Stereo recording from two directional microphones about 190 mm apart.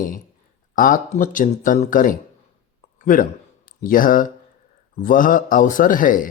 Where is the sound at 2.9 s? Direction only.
45° left (ahead or behind).